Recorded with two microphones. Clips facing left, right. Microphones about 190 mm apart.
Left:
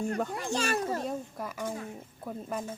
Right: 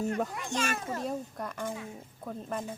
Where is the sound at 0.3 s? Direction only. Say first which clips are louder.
Left 3 dB; 35° left (ahead or behind).